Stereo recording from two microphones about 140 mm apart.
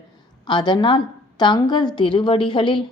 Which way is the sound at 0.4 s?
30° left (ahead or behind).